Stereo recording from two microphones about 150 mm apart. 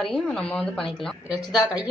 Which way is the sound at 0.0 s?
5° left (ahead or behind).